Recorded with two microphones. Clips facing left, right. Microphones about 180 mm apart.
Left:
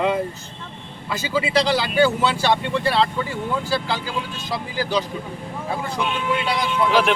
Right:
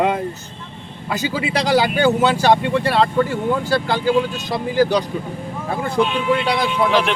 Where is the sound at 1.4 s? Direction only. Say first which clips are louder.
Right 4 dB; 50° right (ahead or behind).